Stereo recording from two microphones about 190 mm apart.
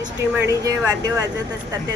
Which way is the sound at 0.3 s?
15° right (ahead or behind).